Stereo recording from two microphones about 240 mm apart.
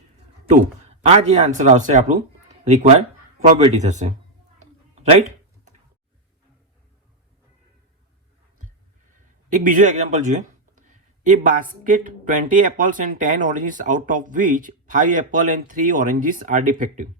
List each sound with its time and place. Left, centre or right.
1.0 s speech: right
4.6 s a sound: right
9.5 s speech: right